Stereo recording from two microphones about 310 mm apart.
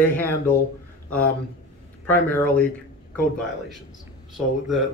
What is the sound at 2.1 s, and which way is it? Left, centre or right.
Speech, centre.